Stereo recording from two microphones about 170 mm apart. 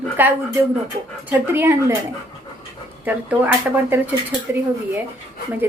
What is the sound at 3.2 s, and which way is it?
Speech, 10° right (ahead or behind).